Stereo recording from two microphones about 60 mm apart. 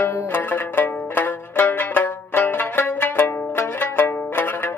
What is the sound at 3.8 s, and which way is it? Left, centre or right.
Music, left.